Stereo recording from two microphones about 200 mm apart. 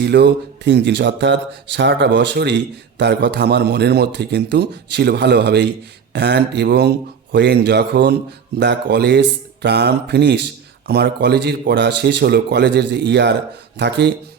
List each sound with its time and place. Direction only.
0.0 s speech: 55° right (ahead or behind)